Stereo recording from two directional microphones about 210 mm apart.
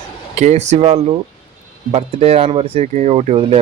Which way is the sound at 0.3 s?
35° right (ahead or behind).